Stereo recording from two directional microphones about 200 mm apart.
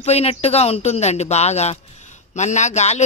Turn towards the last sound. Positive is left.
turn(degrees=35)  # may be behind; listen again after turning